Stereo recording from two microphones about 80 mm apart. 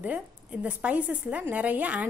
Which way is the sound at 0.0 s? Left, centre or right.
Centre.